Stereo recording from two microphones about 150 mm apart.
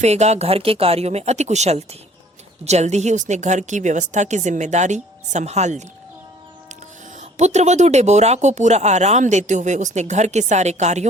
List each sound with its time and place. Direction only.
0.0 s a woman's voice: 50° right (ahead or behind)
7.2 s a woman's voice: 50° right (ahead or behind)